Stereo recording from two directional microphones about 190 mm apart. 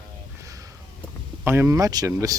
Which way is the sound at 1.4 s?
10° right (ahead or behind).